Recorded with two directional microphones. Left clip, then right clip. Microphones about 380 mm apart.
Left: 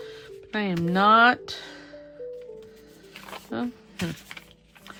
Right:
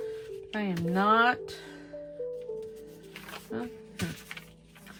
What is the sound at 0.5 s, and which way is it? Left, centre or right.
Speech, centre.